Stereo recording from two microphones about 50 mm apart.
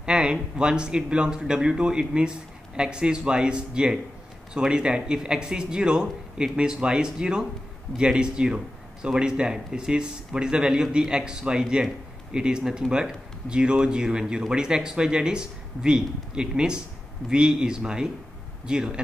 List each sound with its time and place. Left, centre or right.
0.0 s speech: centre